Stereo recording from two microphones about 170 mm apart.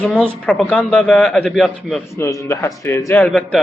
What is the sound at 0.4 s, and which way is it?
A man's voice, 5° left (ahead or behind).